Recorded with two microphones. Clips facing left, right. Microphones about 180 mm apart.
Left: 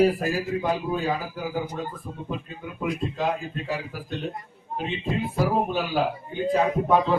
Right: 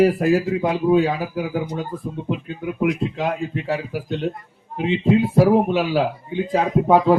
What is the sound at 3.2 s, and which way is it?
A man's voice, 75° right (ahead or behind).